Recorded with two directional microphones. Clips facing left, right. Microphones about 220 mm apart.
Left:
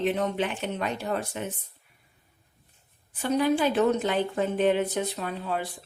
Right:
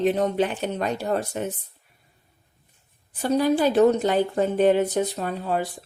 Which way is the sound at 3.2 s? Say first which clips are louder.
Right 3 dB; 40° right (ahead or behind).